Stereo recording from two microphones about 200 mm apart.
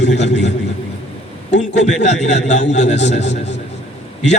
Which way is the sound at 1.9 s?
35° left (ahead or behind).